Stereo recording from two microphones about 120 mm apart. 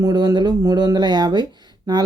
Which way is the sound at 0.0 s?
35° right (ahead or behind).